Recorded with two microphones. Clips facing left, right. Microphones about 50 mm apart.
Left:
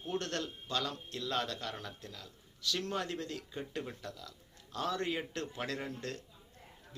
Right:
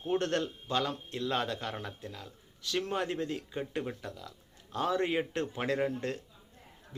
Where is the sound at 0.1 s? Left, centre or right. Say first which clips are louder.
Right 7 dB; right.